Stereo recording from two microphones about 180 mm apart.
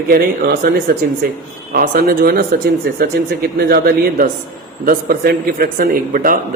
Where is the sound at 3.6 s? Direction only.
60° right (ahead or behind).